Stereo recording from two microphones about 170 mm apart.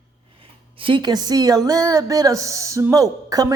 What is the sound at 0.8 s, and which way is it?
A woman's voice, 30° right (ahead or behind).